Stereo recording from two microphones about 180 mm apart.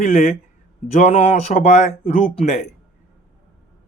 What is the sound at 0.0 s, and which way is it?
A man's voice, 40° left (ahead or behind).